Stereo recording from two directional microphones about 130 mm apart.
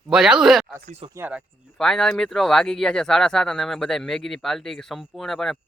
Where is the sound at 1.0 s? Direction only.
40° right (ahead or behind).